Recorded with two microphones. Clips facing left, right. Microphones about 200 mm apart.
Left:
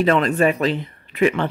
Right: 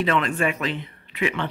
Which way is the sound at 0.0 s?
40° left (ahead or behind).